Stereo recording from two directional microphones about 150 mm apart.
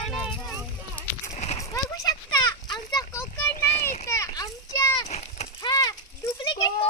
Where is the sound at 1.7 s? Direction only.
25° left (ahead or behind).